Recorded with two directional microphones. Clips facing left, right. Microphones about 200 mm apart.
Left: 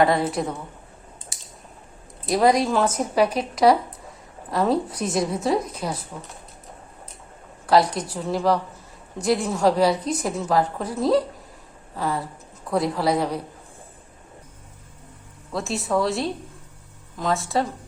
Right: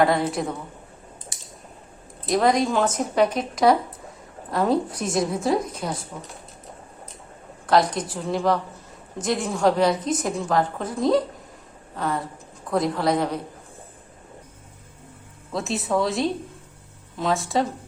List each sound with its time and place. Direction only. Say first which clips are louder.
0.0 s a woman's voice: left 1 dB; centre (ahead or behind)
2.3 s a woman's voice: left 1 dB; 5° left (ahead or behind)
7.7 s a woman's voice: left 1 dB; 5° left (ahead or behind)
15.5 s a woman's voice: even; centre (ahead or behind)